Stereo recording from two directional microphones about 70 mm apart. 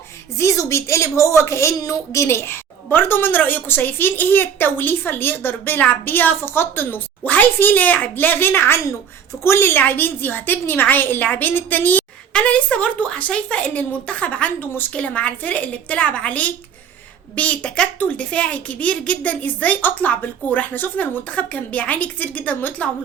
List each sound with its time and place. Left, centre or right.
0.3 s a woman's voice: left